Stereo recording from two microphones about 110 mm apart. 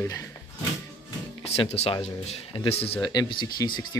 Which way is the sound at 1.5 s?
70° left (ahead or behind).